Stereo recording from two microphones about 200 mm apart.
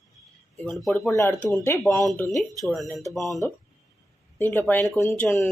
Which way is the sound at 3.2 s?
15° right (ahead or behind).